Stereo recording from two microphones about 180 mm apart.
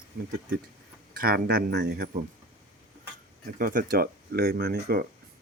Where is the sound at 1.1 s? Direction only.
55° right (ahead or behind).